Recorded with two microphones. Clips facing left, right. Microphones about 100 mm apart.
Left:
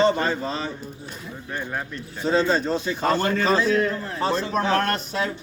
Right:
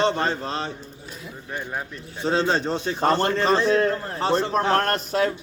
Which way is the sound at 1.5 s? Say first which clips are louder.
Left 1 dB; 15° right (ahead or behind).